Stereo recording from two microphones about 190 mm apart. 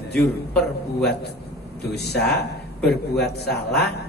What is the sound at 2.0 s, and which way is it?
A man's voice, 60° left (ahead or behind).